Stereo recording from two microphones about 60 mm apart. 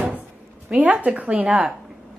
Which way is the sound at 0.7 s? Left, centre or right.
Right.